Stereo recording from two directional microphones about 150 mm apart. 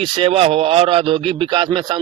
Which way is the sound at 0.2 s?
40° right (ahead or behind).